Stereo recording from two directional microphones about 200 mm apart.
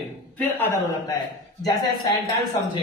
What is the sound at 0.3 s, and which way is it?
Speech, 10° left (ahead or behind).